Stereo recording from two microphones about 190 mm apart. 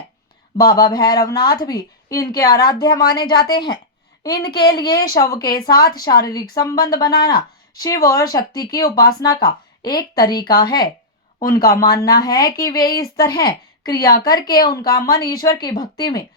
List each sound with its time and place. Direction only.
0.5 s speech: 20° left (ahead or behind)
4.8 s speech: 20° left (ahead or behind)